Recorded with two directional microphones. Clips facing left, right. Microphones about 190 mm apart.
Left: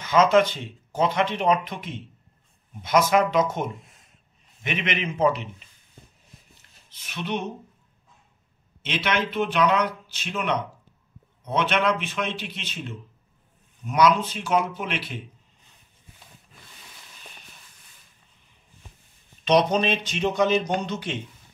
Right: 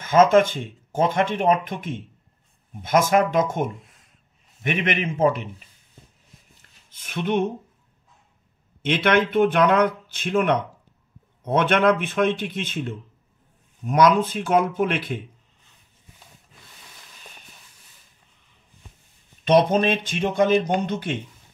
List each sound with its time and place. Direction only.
0.0 s speech: 50° right (ahead or behind)
6.9 s speech: 50° right (ahead or behind)
8.8 s speech: 55° right (ahead or behind)
19.4 s speech: 50° right (ahead or behind)